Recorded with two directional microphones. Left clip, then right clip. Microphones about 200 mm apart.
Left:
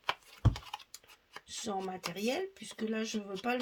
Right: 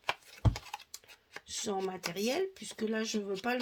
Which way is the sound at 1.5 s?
35° right (ahead or behind).